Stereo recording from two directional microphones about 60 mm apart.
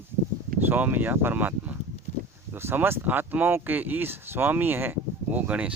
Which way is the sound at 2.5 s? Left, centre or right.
Right.